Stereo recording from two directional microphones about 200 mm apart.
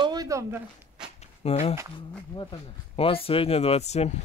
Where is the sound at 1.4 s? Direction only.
30° left (ahead or behind).